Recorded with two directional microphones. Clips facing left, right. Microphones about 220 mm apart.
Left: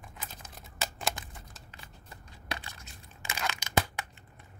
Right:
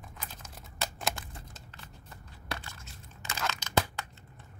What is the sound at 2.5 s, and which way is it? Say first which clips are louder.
Crushing: even; 15° left (ahead or behind).